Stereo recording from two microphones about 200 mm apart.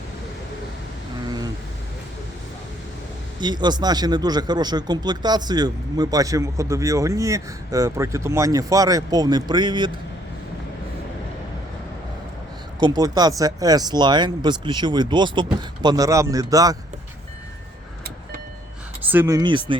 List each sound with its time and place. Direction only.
3.4 s speech: 20° right (ahead or behind)
12.8 s speech: 20° right (ahead or behind)
19.1 s speech: 15° right (ahead or behind)